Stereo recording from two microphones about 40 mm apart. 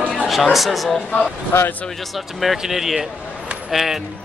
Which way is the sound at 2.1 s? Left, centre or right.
Centre.